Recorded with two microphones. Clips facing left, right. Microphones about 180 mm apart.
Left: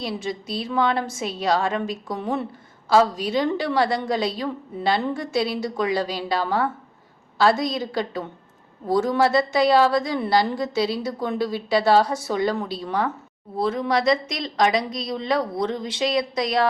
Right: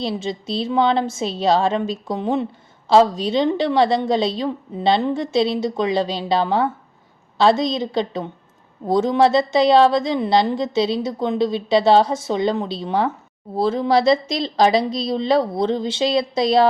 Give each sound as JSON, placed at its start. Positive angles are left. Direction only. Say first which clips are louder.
{"t": 0.0, "sound": "a woman's voice", "louder": "right 4 dB", "side_deg": -25}